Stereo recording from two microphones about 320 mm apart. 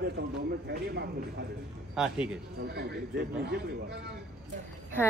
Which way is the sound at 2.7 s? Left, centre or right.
Right.